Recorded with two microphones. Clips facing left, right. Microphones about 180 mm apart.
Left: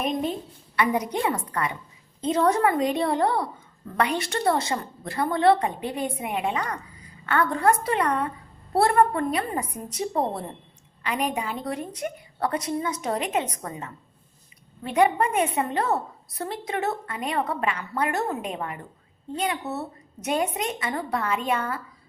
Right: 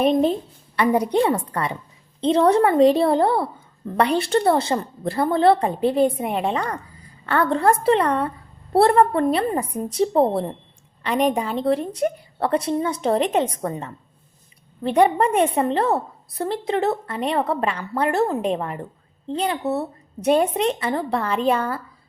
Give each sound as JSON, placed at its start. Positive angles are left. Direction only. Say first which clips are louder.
{"t": 0.0, "sound": "a woman's voice", "louder": "right 9 dB", "side_deg": -30}